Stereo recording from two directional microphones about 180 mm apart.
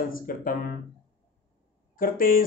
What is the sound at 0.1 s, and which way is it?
Speech, 50° left (ahead or behind).